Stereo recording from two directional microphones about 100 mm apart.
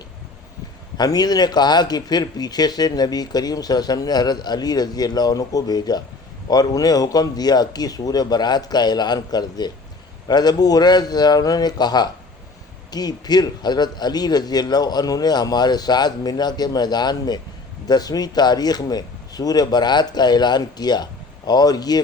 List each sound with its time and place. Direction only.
0.9 s a man's voice: 40° left (ahead or behind)